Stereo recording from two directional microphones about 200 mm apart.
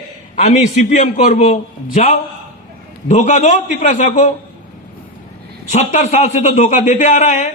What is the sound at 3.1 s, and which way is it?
A man's voice, 35° left (ahead or behind).